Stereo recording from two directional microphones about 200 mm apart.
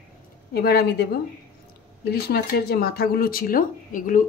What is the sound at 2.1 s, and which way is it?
Speech, 50° left (ahead or behind).